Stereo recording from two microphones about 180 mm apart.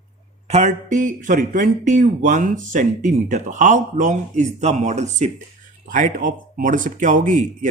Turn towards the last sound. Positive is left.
turn(degrees=-45)  # may be behind; listen again after turning